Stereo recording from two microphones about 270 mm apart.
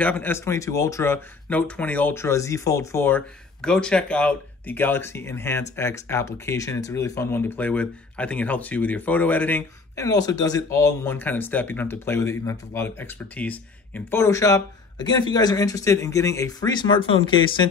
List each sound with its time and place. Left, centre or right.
0.0 s speech: centre